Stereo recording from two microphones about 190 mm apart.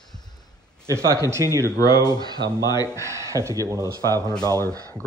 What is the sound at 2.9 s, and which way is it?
Speech, 15° right (ahead or behind).